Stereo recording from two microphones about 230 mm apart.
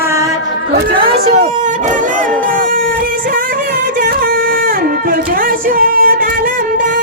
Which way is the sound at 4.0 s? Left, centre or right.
Right.